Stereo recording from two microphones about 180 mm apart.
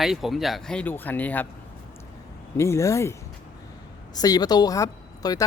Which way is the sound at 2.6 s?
15° left (ahead or behind).